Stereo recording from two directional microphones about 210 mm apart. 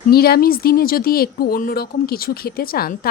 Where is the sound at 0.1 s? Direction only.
45° left (ahead or behind).